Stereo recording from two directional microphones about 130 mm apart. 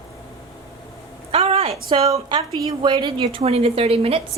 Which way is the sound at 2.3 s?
35° right (ahead or behind).